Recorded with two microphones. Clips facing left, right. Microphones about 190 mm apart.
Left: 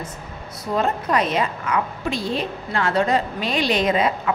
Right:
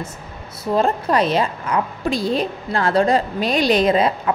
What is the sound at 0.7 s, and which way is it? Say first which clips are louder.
A woman's voice: right 3 dB; 30° right (ahead or behind).